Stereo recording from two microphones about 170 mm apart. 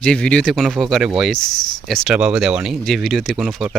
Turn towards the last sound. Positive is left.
turn(degrees=0)  # may be behind; listen again after turning